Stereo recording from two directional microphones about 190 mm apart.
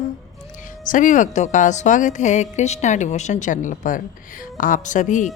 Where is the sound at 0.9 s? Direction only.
45° left (ahead or behind).